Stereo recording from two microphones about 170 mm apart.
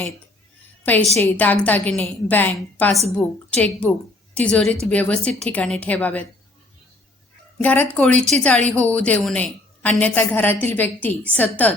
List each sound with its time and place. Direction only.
1.2 s a woman's voice: 10° left (ahead or behind)
7.6 s a woman's voice: 10° left (ahead or behind)